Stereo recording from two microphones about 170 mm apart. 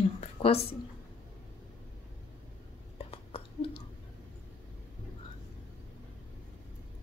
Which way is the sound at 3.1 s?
35° left (ahead or behind).